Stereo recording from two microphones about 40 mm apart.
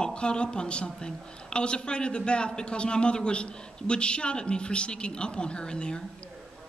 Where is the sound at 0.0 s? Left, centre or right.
Left.